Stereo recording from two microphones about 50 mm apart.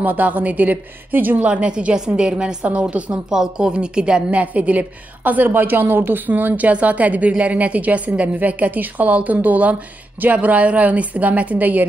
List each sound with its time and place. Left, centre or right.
0.0 s a woman's voice: right
1.4 s a woman's voice: right
2.6 s speech: right
3.3 s a woman's voice: centre
4.3 s a woman's voice: right